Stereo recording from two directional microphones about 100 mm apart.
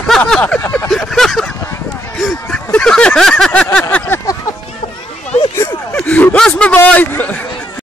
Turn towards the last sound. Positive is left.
turn(degrees=15)  # may be behind; listen again after turning